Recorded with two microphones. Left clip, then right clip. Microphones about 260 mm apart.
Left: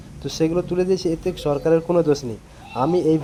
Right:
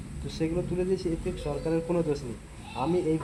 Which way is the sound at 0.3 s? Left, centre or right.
Left.